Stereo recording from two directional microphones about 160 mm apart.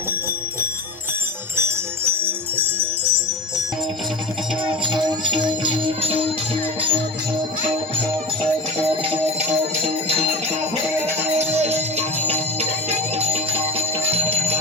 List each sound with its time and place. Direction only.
2.2 s music: 15° right (ahead or behind)
4.6 s music: 30° right (ahead or behind)
8.8 s music: 35° right (ahead or behind)
11.3 s music: 40° right (ahead or behind)